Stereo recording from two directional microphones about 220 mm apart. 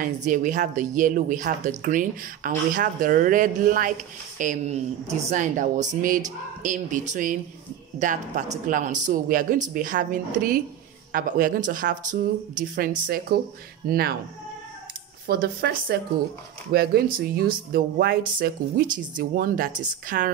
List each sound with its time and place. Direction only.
0.0 s a woman's voice: 35° right (ahead or behind)
15.2 s a woman's voice: 45° right (ahead or behind)